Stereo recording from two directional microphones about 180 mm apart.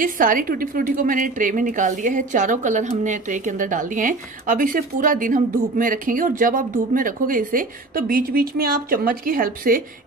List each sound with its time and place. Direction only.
0.0 s a woman's voice: 50° right (ahead or behind)